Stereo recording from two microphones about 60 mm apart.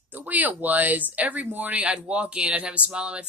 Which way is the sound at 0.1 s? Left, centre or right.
Right.